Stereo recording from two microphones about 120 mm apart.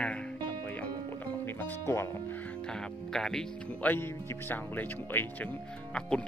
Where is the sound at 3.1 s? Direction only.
5° left (ahead or behind).